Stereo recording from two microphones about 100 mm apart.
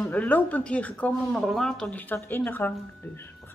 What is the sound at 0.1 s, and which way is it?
Speech, 15° left (ahead or behind).